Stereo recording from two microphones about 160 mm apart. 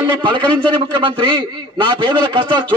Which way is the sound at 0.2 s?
30° right (ahead or behind).